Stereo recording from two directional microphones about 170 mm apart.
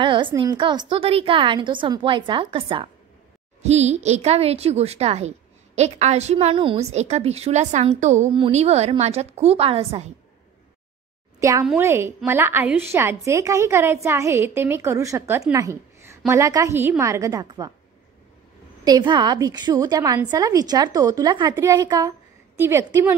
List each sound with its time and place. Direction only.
0.0 s a woman's voice: 30° right (ahead or behind)
11.8 s a woman's voice: 15° right (ahead or behind)
15.5 s a sound: 15° right (ahead or behind)
16.3 s a woman's voice: 20° right (ahead or behind)
18.9 s a woman's voice: 25° right (ahead or behind)